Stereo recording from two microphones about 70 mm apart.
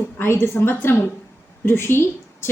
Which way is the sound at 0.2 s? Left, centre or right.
Left.